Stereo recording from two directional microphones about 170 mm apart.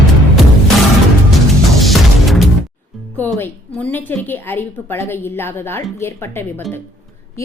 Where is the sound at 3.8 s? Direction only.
10° left (ahead or behind).